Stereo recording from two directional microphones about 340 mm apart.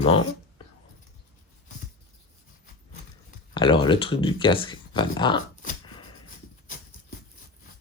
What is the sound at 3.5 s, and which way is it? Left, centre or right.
Speech, centre.